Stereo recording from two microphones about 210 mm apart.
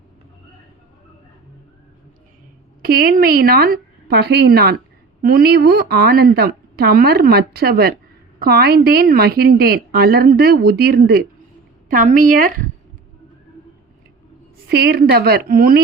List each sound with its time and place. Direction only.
2.8 s a woman's voice: 45° right (ahead or behind)
14.7 s a woman's voice: 50° right (ahead or behind)